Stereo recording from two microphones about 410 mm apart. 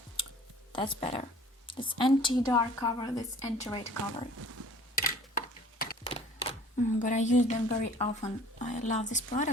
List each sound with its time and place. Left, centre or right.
0.7 s a woman's voice: centre
5.8 s speech: centre